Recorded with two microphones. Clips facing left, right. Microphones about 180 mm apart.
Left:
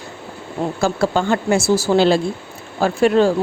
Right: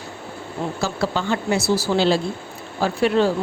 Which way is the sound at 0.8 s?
50° left (ahead or behind).